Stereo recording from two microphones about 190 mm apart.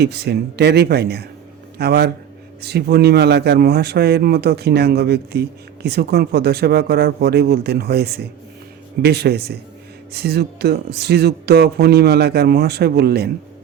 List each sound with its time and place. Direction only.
0.0 s a man's voice: 60° right (ahead or behind)